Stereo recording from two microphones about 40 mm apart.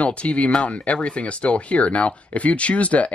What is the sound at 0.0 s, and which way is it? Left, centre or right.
Speech, left.